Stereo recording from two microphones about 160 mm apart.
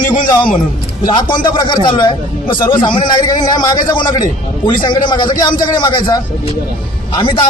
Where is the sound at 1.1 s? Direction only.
25° left (ahead or behind).